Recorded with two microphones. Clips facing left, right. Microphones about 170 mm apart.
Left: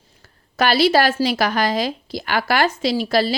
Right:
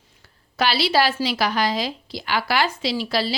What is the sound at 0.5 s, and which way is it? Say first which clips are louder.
Speech: left 5 dB; 45° left (ahead or behind).